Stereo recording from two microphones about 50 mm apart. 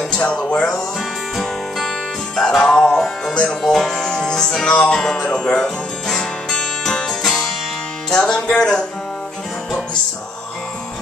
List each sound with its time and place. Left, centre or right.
0.1 s music: left
0.5 s speech: left
1.3 s music: centre
8.4 s speech: centre